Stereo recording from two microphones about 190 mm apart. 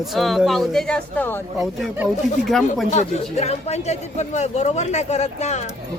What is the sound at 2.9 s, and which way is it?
Speech, 35° left (ahead or behind).